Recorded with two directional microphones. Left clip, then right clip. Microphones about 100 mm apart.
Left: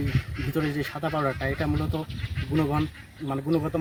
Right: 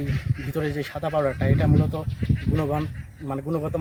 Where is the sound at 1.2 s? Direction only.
15° right (ahead or behind).